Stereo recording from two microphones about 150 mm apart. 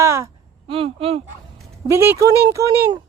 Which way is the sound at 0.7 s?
40° right (ahead or behind).